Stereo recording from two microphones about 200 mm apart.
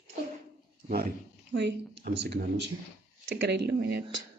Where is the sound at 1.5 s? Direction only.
65° right (ahead or behind).